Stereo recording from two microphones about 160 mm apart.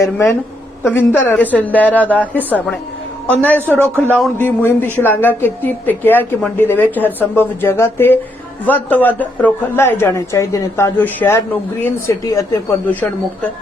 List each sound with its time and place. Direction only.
0.0 s a woman's voice: 15° left (ahead or behind)
3.7 s speech: 15° right (ahead or behind)
4.4 s a woman's voice: 15° left (ahead or behind)
12.9 s a woman's voice: 10° left (ahead or behind)